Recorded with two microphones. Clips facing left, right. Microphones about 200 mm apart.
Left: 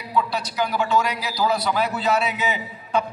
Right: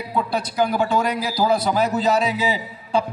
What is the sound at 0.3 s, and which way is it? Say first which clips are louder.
A man's voice: right 4 dB; 55° right (ahead or behind).